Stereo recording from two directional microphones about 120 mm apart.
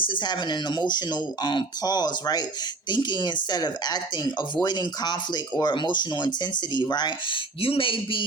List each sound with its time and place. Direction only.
0.0 s speech: 40° left (ahead or behind)
7.6 s speech: 50° left (ahead or behind)